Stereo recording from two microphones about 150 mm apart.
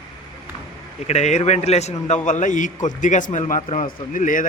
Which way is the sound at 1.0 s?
50° left (ahead or behind).